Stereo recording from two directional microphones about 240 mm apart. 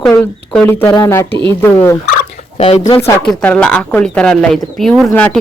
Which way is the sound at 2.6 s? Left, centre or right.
Left.